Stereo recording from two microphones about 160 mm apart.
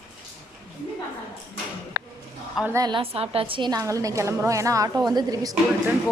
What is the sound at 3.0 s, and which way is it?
A woman's voice, 35° right (ahead or behind).